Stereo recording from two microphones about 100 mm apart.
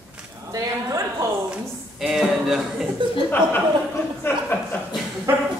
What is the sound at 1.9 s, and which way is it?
Speech, 5° right (ahead or behind).